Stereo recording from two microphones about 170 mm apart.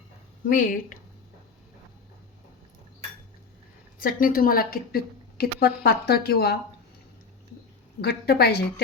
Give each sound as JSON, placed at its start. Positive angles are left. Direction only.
{"t": 0.4, "sound": "speech", "side_deg": 50}
{"t": 4.0, "sound": "a woman's voice", "side_deg": 60}
{"t": 8.0, "sound": "a woman's voice", "side_deg": 65}